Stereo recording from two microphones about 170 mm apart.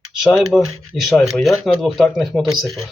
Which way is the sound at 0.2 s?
Centre (ahead or behind).